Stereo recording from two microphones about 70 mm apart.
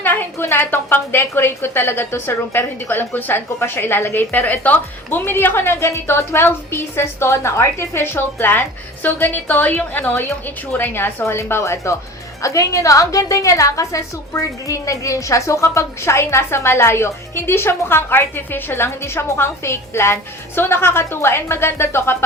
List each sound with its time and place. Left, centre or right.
0.0 s a woman's voice: left